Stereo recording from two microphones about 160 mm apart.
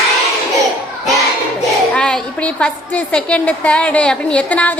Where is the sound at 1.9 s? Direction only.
5° left (ahead or behind).